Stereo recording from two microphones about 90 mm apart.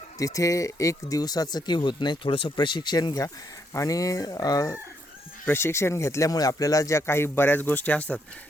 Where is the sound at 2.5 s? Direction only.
55° left (ahead or behind).